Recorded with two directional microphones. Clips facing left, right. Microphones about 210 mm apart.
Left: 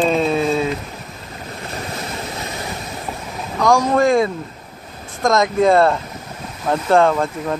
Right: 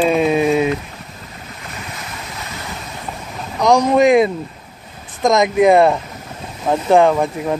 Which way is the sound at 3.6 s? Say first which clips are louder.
Right 3 dB; 20° right (ahead or behind).